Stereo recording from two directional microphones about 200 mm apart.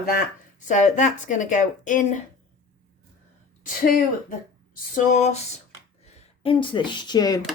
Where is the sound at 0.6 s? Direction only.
40° left (ahead or behind).